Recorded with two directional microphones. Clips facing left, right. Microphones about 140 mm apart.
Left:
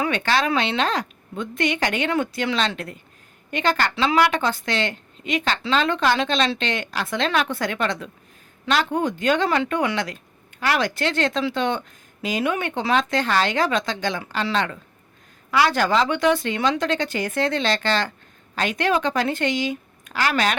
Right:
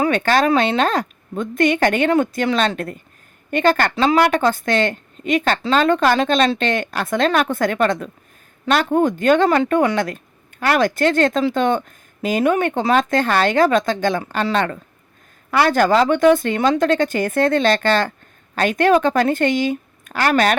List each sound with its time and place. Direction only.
0.0 s a woman's voice: 45° right (ahead or behind)